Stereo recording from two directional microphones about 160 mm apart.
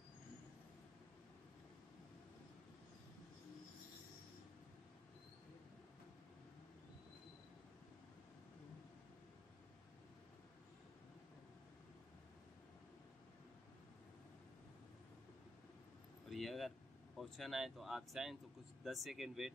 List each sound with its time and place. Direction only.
16.3 s vehicle: centre (ahead or behind)
17.2 s speech: centre (ahead or behind)